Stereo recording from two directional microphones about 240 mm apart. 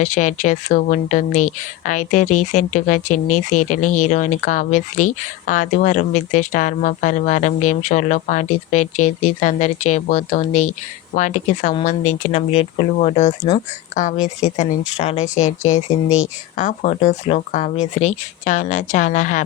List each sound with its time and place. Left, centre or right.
0.0 s speech: left
10.5 s speech: left
11.1 s speech: left